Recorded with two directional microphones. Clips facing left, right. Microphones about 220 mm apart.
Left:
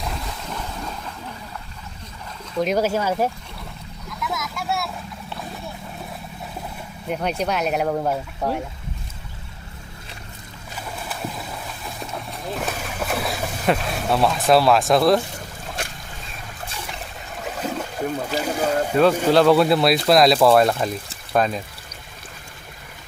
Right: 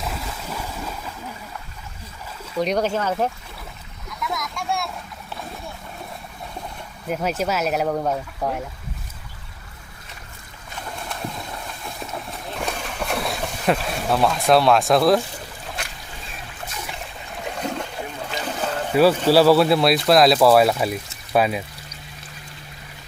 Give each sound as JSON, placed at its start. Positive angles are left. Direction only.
{"t": 0.0, "sound": "boat", "side_deg": -5}
{"t": 2.6, "sound": "speech", "side_deg": 5}
{"t": 4.2, "sound": "vehicle", "side_deg": 0}
{"t": 7.1, "sound": "speech", "side_deg": -5}
{"t": 10.8, "sound": "boat", "side_deg": 5}
{"t": 17.4, "sound": "a sound", "side_deg": 5}
{"t": 18.3, "sound": "boat", "side_deg": 10}
{"t": 19.3, "sound": "speech", "side_deg": -5}